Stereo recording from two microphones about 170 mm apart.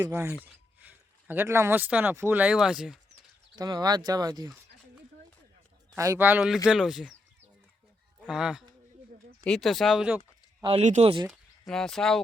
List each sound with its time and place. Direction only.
0.1 s speech: 15° right (ahead or behind)
3.5 s speech: 20° right (ahead or behind)
6.0 s speech: 15° right (ahead or behind)
8.3 s speech: 5° right (ahead or behind)
10.6 s speech: 30° right (ahead or behind)
11.3 s speech: centre (ahead or behind)